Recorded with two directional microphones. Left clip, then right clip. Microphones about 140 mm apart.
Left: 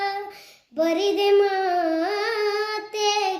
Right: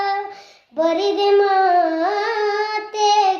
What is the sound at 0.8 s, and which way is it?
Child singing, 30° right (ahead or behind).